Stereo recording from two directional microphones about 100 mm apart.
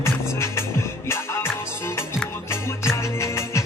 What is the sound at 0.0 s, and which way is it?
Music, 25° left (ahead or behind).